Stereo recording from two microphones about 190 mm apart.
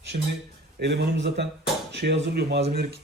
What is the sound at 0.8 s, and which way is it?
Speech, 60° right (ahead or behind).